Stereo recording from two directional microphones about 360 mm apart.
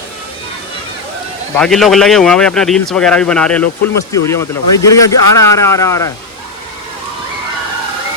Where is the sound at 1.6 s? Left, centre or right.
Centre.